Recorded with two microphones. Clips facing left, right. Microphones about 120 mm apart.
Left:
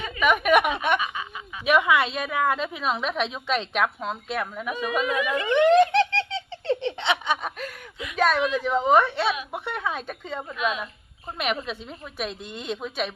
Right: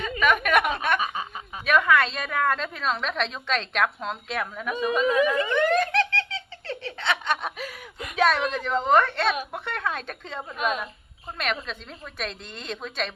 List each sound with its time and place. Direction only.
0.2 s speech: 10° left (ahead or behind)
0.9 s snicker: 35° right (ahead or behind)
1.6 s a woman's voice: 15° left (ahead or behind)
5.0 s a sound: 35° right (ahead or behind)
5.5 s giggle: 20° left (ahead or behind)
7.0 s snicker: 15° left (ahead or behind)
7.6 s a sound: 5° right (ahead or behind)
8.1 s a woman's voice: centre (ahead or behind)
10.5 s a woman's voice: 45° right (ahead or behind)
11.3 s a woman's voice: 10° left (ahead or behind)